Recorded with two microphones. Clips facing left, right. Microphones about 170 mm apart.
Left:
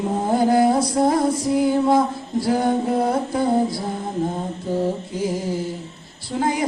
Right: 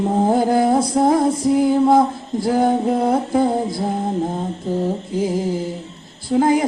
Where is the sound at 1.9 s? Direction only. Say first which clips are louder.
Right 3 dB; 50° right (ahead or behind).